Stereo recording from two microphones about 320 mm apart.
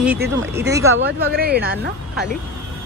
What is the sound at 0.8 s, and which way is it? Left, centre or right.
Speech, right.